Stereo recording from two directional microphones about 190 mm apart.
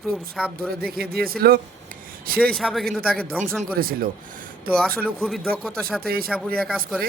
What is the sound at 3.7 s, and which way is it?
Speech, 50° right (ahead or behind).